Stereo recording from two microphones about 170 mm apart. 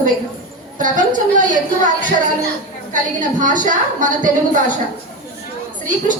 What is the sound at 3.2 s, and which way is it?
A woman's voice, 50° right (ahead or behind).